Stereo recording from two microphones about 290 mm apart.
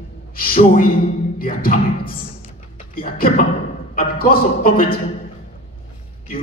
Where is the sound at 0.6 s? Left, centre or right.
Left.